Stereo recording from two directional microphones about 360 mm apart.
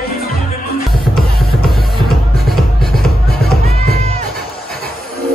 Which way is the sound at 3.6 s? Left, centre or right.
Centre.